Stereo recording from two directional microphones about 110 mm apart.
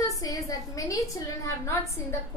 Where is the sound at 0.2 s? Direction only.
30° left (ahead or behind).